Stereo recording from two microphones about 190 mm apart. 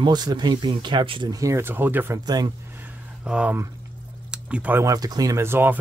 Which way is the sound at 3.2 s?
5° right (ahead or behind).